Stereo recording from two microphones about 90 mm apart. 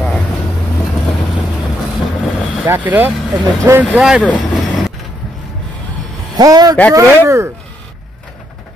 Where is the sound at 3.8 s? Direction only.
10° right (ahead or behind).